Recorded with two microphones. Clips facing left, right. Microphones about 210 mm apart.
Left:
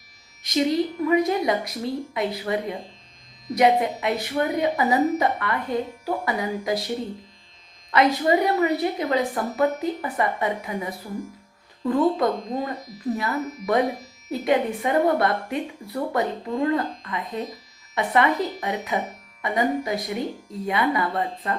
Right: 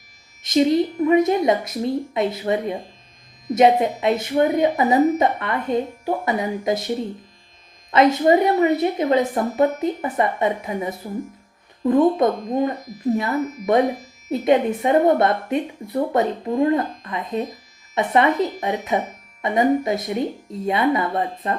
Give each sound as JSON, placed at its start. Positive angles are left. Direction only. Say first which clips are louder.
{"t": 0.4, "sound": "a woman's voice", "louder": "right 5 dB", "side_deg": -25}